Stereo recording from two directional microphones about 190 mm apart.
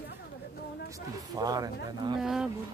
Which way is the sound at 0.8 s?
20° right (ahead or behind).